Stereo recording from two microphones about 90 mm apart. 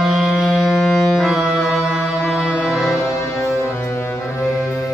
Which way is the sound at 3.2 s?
35° left (ahead or behind).